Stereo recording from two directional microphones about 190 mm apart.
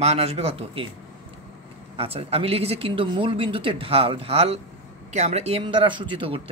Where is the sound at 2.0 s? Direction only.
30° right (ahead or behind).